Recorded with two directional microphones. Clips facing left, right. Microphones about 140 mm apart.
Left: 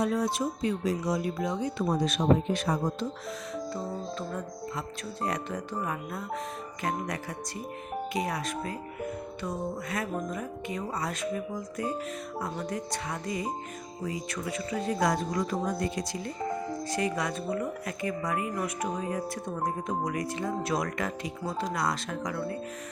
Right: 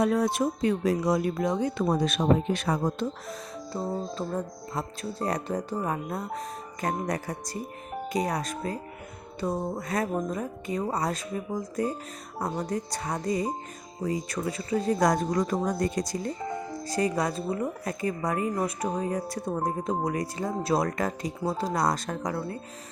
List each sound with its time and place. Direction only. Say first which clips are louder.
0.0 s speech: right 4 dB; 55° right (ahead or behind)
3.7 s a woman's voice: right 8 dB; 30° right (ahead or behind)